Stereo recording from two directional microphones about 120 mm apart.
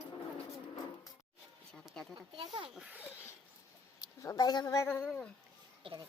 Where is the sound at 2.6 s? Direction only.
5° right (ahead or behind).